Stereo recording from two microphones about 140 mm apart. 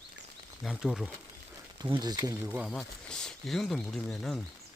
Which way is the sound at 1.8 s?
30° right (ahead or behind).